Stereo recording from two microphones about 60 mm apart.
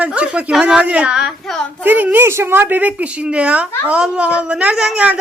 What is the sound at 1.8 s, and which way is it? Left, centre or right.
Speech, right.